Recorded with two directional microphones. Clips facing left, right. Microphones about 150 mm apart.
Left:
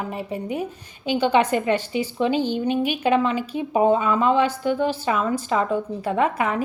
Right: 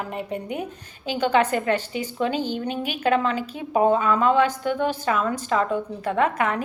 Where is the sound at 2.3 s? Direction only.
45° right (ahead or behind).